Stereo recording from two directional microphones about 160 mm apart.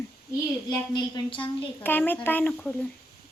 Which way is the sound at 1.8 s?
10° left (ahead or behind).